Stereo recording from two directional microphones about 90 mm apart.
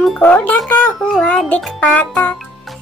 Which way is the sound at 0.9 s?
Centre (ahead or behind).